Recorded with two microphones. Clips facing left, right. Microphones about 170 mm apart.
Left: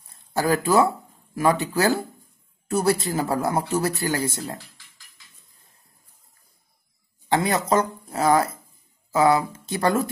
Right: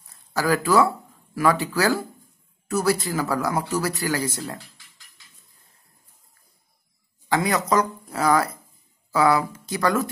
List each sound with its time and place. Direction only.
0.3 s a man's voice: 25° left (ahead or behind)
7.2 s a man's voice: 25° left (ahead or behind)